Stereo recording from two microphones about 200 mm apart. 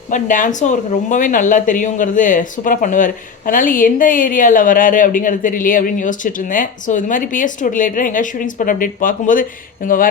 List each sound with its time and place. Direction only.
0.1 s speech: 40° left (ahead or behind)